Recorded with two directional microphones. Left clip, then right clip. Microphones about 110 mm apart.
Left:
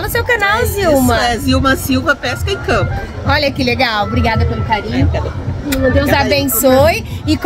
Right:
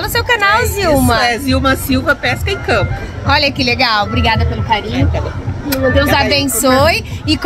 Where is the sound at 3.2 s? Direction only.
30° left (ahead or behind).